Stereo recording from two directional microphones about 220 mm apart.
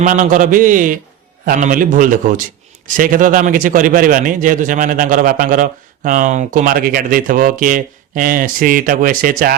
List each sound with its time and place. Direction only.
0.0 s a man's voice: 35° right (ahead or behind)